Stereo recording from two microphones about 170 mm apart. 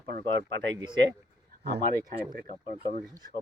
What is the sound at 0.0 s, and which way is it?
Speech, 80° right.